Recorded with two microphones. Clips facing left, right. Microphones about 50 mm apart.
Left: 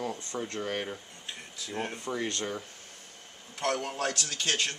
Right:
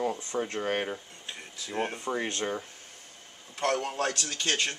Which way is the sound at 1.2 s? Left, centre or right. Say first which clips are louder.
Right 1 dB; centre.